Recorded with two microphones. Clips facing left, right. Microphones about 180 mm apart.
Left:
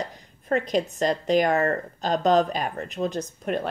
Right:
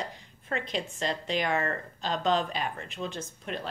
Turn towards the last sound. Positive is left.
turn(degrees=50)  # may be behind; listen again after turning